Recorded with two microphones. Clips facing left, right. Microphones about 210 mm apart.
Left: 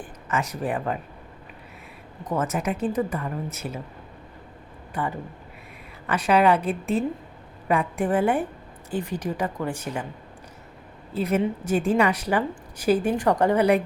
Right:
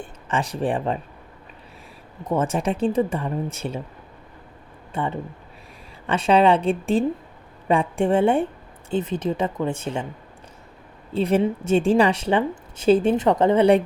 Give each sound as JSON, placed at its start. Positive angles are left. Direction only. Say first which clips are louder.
{"t": 0.0, "sound": "speech", "louder": "right 2 dB", "side_deg": -30}
{"t": 2.3, "sound": "a woman's voice", "louder": "right 3 dB", "side_deg": -30}
{"t": 4.9, "sound": "a woman's voice", "louder": "right 3 dB", "side_deg": -25}
{"t": 11.1, "sound": "a woman's voice", "louder": "right 4 dB", "side_deg": -30}